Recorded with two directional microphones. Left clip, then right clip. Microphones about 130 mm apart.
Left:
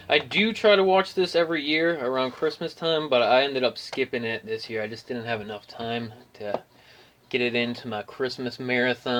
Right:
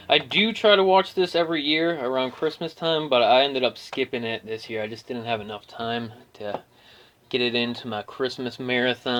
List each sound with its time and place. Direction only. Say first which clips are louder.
0.1 s speech: right 2 dB; 35° right (ahead or behind)